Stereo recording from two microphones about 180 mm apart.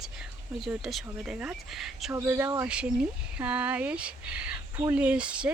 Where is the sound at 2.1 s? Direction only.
15° right (ahead or behind).